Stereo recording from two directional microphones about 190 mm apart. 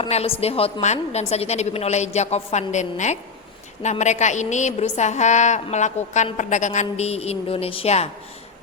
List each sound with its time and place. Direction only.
0.0 s a woman's voice: 30° left (ahead or behind)